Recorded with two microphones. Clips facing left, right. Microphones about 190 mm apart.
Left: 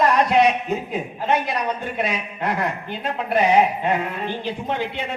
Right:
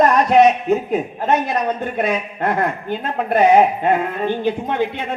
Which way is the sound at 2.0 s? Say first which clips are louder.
Right 6 dB; 55° right (ahead or behind).